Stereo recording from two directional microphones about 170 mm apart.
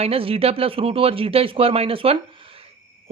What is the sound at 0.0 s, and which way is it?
Speech, 35° right (ahead or behind).